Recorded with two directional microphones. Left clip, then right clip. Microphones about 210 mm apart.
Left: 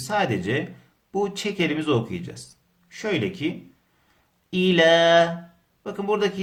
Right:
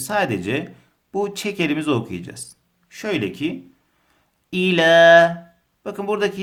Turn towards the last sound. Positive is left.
turn(degrees=-35)  # may be behind; listen again after turning